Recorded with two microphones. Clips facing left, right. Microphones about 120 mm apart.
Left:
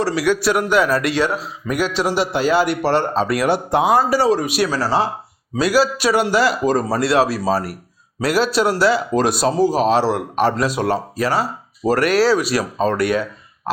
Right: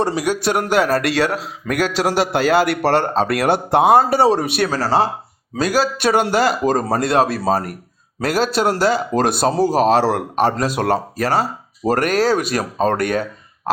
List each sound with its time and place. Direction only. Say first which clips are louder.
0.0 s a man's voice: right 1 dB; 20° right (ahead or behind)
0.7 s a man's voice: right 1 dB; 40° right (ahead or behind)
1.3 s a man's voice: even; 60° right (ahead or behind); by 10.7 s 45° right (ahead or behind)
10.8 s a man's voice: right 1 dB; 55° right (ahead or behind)